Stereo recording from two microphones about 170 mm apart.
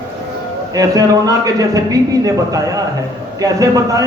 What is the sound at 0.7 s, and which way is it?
A man's voice, 20° right (ahead or behind).